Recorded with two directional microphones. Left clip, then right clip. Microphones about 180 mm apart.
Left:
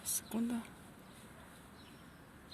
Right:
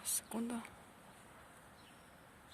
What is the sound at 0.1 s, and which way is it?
Whispering, 15° right (ahead or behind).